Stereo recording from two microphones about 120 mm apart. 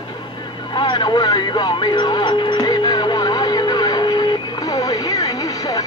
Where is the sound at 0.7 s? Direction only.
40° left (ahead or behind).